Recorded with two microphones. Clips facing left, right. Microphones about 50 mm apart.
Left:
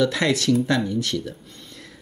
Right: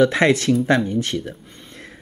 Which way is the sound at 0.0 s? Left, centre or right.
Right.